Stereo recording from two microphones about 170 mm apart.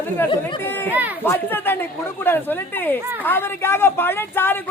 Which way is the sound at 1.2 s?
10° left (ahead or behind).